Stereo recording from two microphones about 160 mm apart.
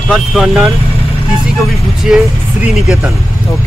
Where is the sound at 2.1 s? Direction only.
5° right (ahead or behind).